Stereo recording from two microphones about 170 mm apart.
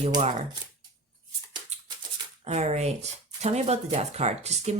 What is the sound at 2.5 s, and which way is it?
Speech, 40° right (ahead or behind).